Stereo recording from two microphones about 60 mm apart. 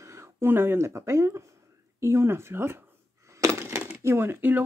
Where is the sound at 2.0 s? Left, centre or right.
Right.